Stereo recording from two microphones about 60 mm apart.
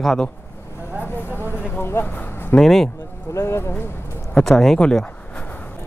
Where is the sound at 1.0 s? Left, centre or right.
Left.